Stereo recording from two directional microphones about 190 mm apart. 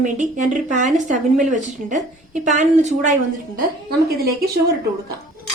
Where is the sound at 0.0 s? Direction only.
40° right (ahead or behind).